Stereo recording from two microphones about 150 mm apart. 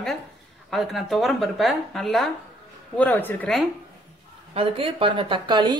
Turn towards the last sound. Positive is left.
turn(degrees=-30)  # may be behind; listen again after turning